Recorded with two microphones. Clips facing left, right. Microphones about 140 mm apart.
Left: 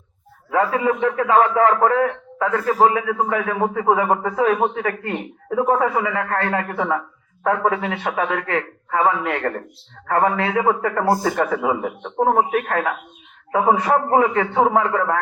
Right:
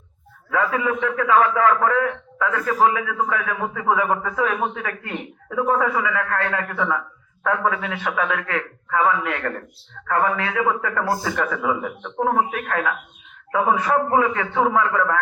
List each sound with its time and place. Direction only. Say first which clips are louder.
0.5 s a man's voice: left 3 dB; 35° left (ahead or behind)
11.2 s a man's voice: left 4 dB; 40° left (ahead or behind)